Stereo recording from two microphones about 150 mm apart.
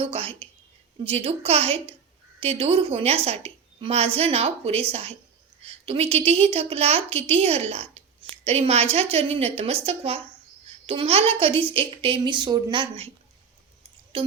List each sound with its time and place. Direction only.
0.0 s a woman's voice: 40° right (ahead or behind)
14.1 s speech: 35° right (ahead or behind)